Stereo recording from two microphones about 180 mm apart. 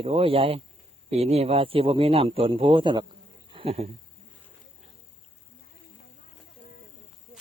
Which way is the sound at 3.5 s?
30° right (ahead or behind).